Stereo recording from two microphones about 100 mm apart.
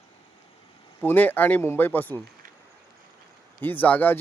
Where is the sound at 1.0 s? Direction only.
20° left (ahead or behind).